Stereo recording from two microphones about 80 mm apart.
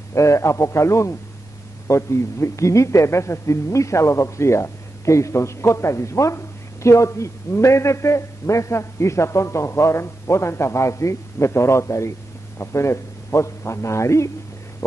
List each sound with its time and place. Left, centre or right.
0.1 s a man's voice: left